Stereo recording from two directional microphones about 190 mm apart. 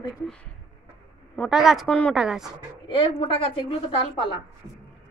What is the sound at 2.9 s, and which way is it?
Speech, 25° left (ahead or behind).